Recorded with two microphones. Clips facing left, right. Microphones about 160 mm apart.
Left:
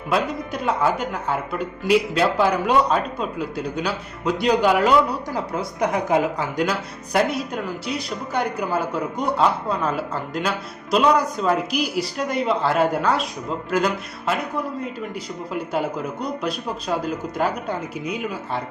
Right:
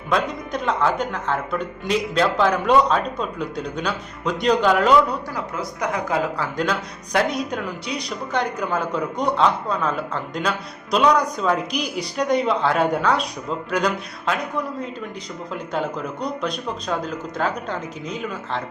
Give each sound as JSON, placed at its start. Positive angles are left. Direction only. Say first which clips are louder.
{"t": 0.1, "sound": "speech", "louder": "even", "side_deg": 5}
{"t": 5.5, "sound": "speech", "louder": "left 3 dB", "side_deg": 25}
{"t": 6.7, "sound": "speech", "louder": "right 1 dB", "side_deg": 5}